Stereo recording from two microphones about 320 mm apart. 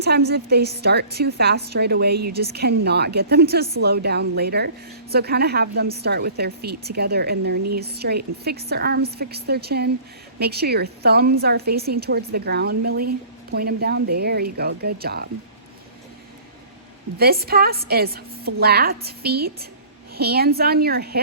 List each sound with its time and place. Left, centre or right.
0.0 s a woman's voice: right
17.2 s a woman's voice: right